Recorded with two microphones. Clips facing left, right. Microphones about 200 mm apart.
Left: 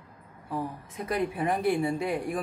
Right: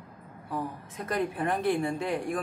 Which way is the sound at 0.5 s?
5° left (ahead or behind).